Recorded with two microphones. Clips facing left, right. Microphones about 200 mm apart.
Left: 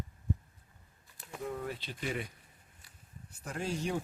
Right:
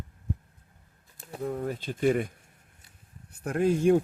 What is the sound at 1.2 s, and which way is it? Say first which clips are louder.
Speech: right 7 dB; 35° right (ahead or behind).